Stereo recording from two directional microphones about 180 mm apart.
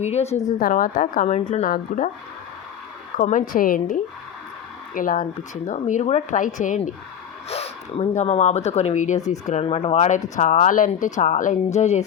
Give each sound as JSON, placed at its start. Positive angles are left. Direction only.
{"t": 0.0, "sound": "speech", "side_deg": 35}
{"t": 0.6, "sound": "speech", "side_deg": 50}
{"t": 3.2, "sound": "speech", "side_deg": 45}